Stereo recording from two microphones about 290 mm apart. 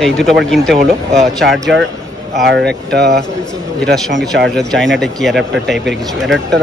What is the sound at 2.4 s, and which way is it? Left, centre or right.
Speech, right.